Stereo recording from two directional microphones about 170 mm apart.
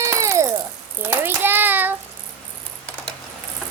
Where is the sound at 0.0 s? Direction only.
15° right (ahead or behind).